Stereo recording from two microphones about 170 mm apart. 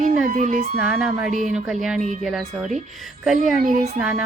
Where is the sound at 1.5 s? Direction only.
5° right (ahead or behind).